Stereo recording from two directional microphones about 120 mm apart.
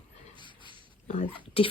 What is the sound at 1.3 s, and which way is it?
Speech, 50° left (ahead or behind).